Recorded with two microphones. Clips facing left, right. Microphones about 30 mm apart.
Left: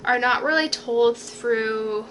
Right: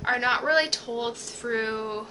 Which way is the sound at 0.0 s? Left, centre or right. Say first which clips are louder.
Left 4 dB; centre.